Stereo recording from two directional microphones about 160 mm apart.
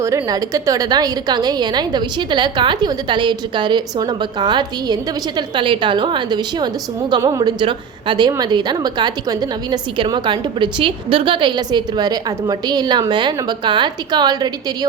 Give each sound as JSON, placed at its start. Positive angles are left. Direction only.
{"t": 0.0, "sound": "a woman's voice", "side_deg": -20}